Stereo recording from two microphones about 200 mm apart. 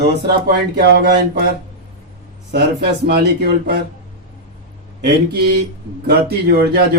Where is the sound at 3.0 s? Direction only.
55° right (ahead or behind).